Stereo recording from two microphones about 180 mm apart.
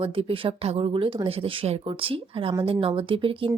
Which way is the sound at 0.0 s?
30° right (ahead or behind).